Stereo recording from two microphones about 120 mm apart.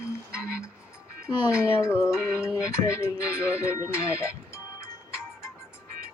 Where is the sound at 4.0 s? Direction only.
25° left (ahead or behind).